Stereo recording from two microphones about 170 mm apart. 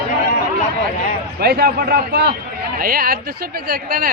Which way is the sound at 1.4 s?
70° right (ahead or behind).